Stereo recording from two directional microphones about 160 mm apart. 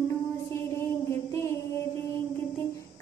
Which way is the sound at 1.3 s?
15° left (ahead or behind).